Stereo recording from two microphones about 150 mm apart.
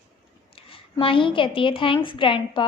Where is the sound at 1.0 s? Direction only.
35° left (ahead or behind).